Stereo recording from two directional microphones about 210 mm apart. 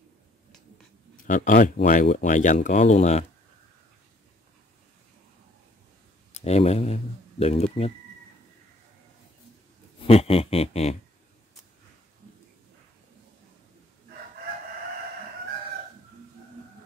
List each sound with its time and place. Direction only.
1.1 s speech: 40° left (ahead or behind)
6.4 s speech: 30° left (ahead or behind)
10.0 s speech: 30° left (ahead or behind)